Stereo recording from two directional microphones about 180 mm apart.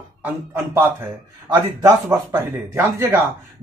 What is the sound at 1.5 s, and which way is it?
Speech, 20° right (ahead or behind).